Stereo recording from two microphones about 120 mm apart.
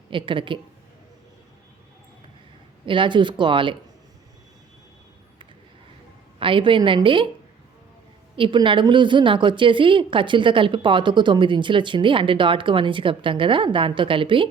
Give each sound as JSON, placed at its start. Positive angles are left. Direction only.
{"t": 0.1, "sound": "a woman's voice", "side_deg": -45}
{"t": 2.8, "sound": "a woman's voice", "side_deg": -45}
{"t": 6.4, "sound": "a woman's voice", "side_deg": -45}
{"t": 8.4, "sound": "a woman's voice", "side_deg": -45}